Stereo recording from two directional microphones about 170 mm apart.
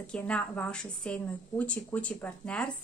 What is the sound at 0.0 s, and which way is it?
A woman's voice, 5° left (ahead or behind).